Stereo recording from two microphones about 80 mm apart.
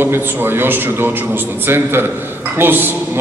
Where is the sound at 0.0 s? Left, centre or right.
Right.